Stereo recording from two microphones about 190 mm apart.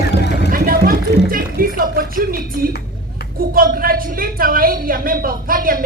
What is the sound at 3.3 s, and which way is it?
A woman's voice, 50° right (ahead or behind).